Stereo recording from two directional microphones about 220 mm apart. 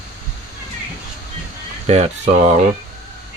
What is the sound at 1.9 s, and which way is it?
Speech, 30° right (ahead or behind).